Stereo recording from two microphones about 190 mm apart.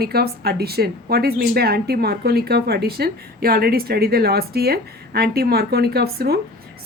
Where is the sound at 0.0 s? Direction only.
55° right (ahead or behind).